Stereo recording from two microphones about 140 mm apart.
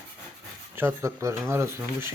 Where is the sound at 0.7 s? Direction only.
20° right (ahead or behind).